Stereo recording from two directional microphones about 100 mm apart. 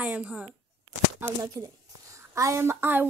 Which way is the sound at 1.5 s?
30° right (ahead or behind).